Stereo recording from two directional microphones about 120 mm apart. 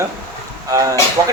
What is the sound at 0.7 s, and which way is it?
Speech, 30° right (ahead or behind).